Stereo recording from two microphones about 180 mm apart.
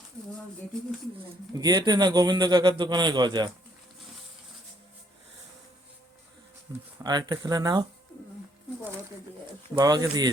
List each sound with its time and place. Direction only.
1.5 s speech: 20° right (ahead or behind)
6.7 s speech: 20° right (ahead or behind)
9.7 s speech: 20° right (ahead or behind)